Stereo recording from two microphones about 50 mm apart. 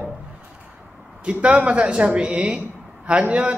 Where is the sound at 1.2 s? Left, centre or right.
Right.